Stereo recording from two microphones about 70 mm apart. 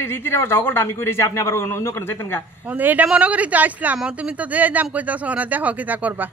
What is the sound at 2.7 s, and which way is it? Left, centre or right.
Speech, right.